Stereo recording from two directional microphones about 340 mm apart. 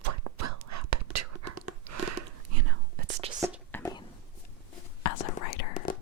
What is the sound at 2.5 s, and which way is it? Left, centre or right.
Whispering, right.